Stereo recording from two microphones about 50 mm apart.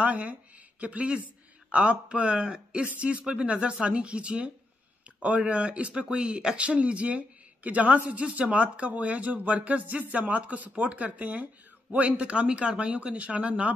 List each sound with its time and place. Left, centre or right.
0.0 s speech: right